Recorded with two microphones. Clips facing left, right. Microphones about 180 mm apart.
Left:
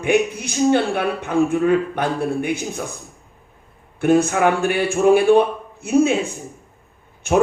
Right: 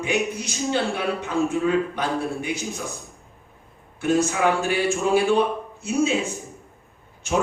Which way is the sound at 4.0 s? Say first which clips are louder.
Left 5 dB; 55° left (ahead or behind).